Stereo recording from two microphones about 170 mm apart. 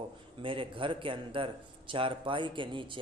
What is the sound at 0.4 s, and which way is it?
A man's voice, 30° right (ahead or behind).